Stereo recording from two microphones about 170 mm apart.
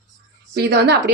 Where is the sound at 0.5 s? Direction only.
75° right (ahead or behind).